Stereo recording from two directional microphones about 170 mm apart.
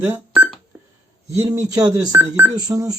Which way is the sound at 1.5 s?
20° right (ahead or behind).